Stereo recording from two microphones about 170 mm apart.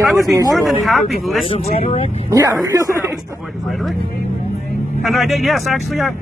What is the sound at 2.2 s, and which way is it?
Speech, 20° right (ahead or behind).